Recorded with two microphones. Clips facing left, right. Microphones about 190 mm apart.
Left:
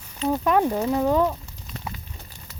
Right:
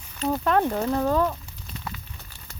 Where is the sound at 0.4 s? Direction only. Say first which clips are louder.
Left 1 dB; 10° left (ahead or behind).